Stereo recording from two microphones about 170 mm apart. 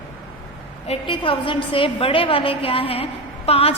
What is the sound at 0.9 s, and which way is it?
A woman's voice, 30° left (ahead or behind).